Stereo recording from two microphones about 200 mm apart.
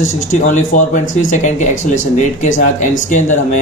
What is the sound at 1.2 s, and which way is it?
Speech, 40° left (ahead or behind).